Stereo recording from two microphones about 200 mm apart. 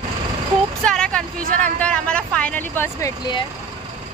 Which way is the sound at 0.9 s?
5° left (ahead or behind).